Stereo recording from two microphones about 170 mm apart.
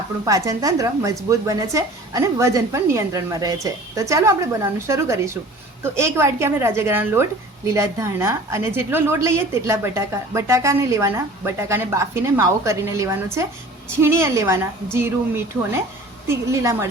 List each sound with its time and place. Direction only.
0.3 s a woman's voice: 20° right (ahead or behind)
16.2 s a woman's voice: 15° right (ahead or behind)